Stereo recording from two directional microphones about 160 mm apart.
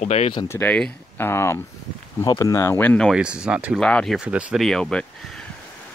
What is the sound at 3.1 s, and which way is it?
Speech, 5° right (ahead or behind).